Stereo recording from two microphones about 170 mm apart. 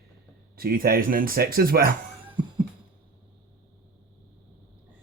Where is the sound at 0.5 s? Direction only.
60° right (ahead or behind).